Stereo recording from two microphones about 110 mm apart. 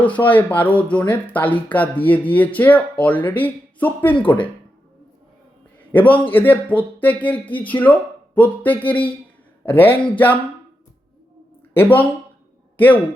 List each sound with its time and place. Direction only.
0.0 s speech: 15° left (ahead or behind)
5.9 s speech: 15° left (ahead or behind)
11.7 s a man's voice: 20° left (ahead or behind)